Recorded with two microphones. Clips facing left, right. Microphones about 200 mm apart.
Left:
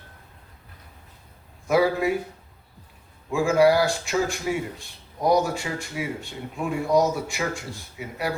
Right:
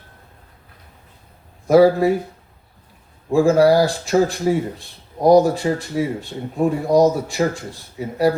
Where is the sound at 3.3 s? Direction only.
35° right (ahead or behind).